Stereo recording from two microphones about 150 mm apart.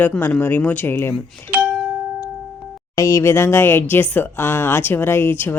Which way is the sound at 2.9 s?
20° left (ahead or behind).